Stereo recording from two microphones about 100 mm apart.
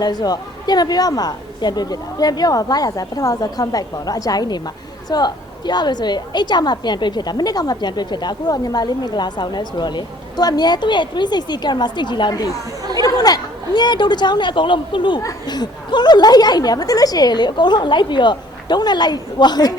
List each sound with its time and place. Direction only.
0.0 s a woman's voice: 40° left (ahead or behind)
15.2 s a woman's voice: 40° left (ahead or behind)